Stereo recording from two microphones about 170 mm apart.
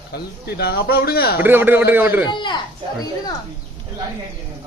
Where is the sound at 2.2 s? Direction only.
25° left (ahead or behind).